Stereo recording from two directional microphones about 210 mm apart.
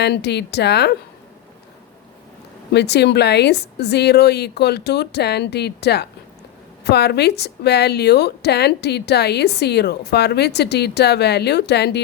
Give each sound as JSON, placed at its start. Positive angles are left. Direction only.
{"t": 0.0, "sound": "speech", "side_deg": 50}
{"t": 2.7, "sound": "speech", "side_deg": 50}